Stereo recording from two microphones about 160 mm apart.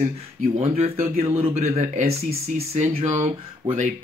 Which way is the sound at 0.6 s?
40° right (ahead or behind).